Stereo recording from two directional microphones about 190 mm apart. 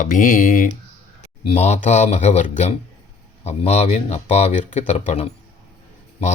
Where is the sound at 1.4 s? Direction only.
30° left (ahead or behind).